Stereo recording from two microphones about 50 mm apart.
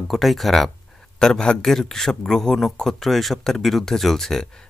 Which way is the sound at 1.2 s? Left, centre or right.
Centre.